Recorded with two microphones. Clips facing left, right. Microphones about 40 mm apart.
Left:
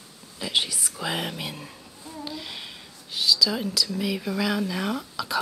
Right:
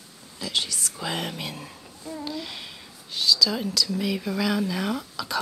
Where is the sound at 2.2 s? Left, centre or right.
Centre.